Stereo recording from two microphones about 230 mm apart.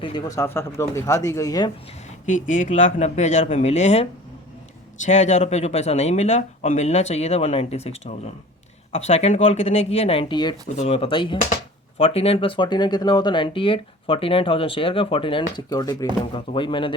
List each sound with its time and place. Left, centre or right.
0.0 s speech: centre
2.2 s speech: left